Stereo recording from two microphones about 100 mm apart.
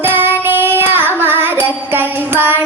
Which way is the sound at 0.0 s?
20° right (ahead or behind).